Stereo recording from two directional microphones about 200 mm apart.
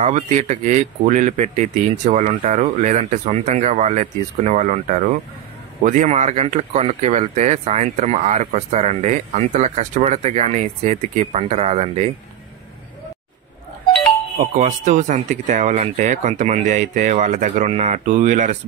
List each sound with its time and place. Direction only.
0.0 s speech: 35° right (ahead or behind)
14.5 s speech: 40° right (ahead or behind)